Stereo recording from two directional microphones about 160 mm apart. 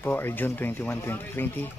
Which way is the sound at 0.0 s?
10° left (ahead or behind).